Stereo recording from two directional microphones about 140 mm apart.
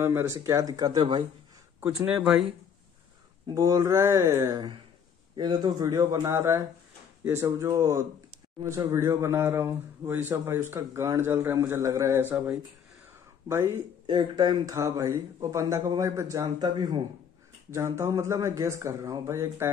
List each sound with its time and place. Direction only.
0.0 s speech: 15° right (ahead or behind); by 1.2 s 30° right (ahead or behind)
1.8 s speech: 15° right (ahead or behind)
3.5 s speech: 25° right (ahead or behind)
5.3 s speech: 30° right (ahead or behind)
14.0 s speech: 35° right (ahead or behind)